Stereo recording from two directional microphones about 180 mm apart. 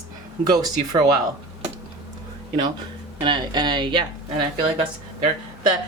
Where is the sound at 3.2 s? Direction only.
25° right (ahead or behind).